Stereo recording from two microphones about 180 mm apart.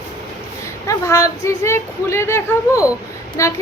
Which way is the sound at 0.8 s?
15° left (ahead or behind).